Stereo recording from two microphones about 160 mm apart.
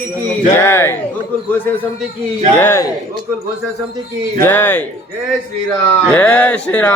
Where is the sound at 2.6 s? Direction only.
15° left (ahead or behind).